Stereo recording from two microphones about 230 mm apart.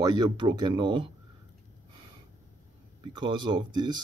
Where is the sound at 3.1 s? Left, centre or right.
Centre.